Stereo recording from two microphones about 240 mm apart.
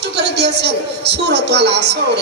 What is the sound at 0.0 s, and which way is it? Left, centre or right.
A man's voice, right.